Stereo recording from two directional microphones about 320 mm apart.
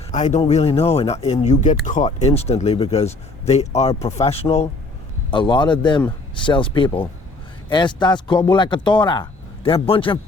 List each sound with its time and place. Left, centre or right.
0.1 s speech: left